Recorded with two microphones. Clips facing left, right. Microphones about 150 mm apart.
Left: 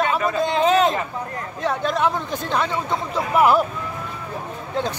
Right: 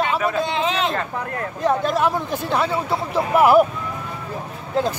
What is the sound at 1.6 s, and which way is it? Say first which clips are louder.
Speech: right 2 dB; 5° right (ahead or behind).